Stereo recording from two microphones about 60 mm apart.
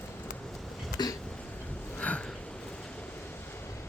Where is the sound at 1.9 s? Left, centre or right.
Left.